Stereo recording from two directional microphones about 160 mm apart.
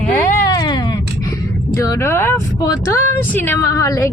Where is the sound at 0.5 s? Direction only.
25° left (ahead or behind).